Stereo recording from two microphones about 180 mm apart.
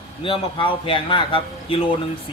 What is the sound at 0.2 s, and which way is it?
Speech, 30° left (ahead or behind).